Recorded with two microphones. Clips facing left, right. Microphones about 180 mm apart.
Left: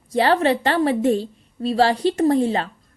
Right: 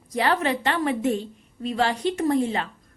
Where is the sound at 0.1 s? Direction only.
30° left (ahead or behind).